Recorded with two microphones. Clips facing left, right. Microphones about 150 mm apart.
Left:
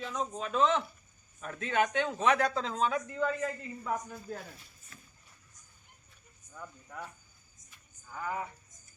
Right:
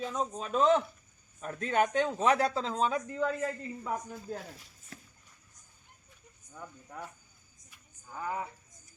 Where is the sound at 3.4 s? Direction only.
10° right (ahead or behind).